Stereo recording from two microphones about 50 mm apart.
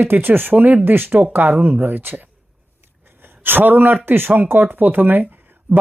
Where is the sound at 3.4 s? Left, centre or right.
Right.